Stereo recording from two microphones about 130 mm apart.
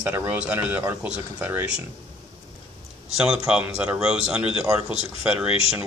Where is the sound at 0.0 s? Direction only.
15° right (ahead or behind).